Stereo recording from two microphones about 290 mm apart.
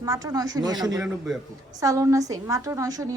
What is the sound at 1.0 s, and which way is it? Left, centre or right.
Speech, centre.